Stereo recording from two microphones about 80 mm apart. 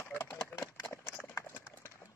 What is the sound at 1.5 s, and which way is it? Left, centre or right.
Horse, left.